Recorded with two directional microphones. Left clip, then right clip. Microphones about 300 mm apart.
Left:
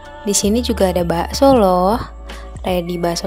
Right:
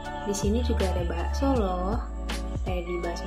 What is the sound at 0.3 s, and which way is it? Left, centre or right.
A woman's voice, left.